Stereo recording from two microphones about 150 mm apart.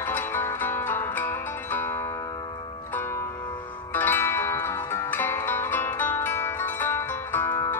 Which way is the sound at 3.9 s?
15° left (ahead or behind).